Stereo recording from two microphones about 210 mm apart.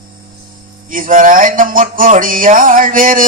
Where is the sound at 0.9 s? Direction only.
40° right (ahead or behind).